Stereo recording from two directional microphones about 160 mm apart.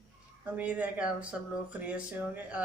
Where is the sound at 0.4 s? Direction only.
10° right (ahead or behind).